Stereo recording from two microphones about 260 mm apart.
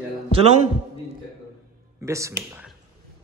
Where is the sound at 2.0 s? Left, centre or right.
Centre.